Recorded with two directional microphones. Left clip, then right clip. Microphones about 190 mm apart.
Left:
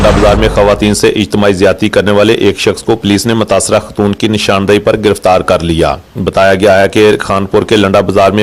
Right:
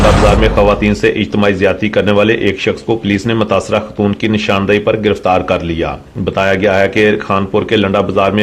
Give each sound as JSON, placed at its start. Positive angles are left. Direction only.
{"t": 0.0, "sound": "artillery fire", "side_deg": 0}
{"t": 0.4, "sound": "speech", "side_deg": 45}